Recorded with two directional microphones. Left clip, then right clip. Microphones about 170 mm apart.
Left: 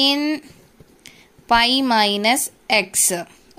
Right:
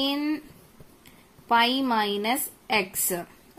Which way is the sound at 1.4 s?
40° left (ahead or behind).